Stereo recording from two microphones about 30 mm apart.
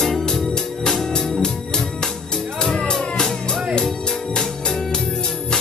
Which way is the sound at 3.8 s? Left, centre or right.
Left.